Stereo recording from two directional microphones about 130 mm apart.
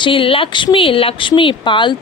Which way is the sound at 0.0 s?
40° left (ahead or behind).